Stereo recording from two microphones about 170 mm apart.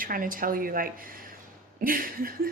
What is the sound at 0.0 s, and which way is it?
Speech, 55° right (ahead or behind).